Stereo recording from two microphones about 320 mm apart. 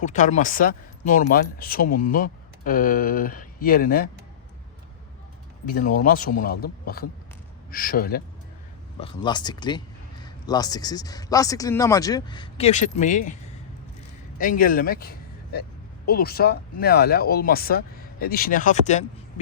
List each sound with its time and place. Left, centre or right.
0.0 s speech: left
5.6 s speech: left
9.0 s speech: centre
14.3 s a man's voice: left